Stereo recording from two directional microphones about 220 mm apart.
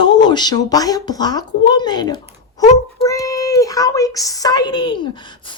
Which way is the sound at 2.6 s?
30° left (ahead or behind).